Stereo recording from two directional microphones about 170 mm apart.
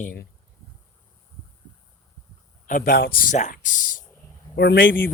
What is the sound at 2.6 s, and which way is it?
Speech, 55° left (ahead or behind).